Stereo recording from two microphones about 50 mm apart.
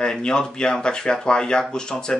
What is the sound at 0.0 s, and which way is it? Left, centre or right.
Speech, centre.